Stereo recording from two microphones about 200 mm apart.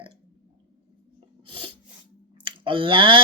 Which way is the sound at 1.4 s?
25° right (ahead or behind).